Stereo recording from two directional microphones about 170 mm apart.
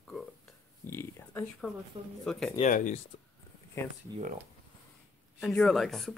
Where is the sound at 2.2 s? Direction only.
Centre (ahead or behind).